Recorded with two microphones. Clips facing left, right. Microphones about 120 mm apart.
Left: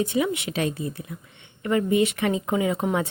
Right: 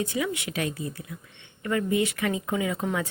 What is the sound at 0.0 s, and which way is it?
A woman's voice, 25° left (ahead or behind).